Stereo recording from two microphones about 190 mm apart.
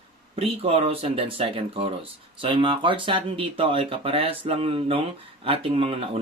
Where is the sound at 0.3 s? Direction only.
30° right (ahead or behind).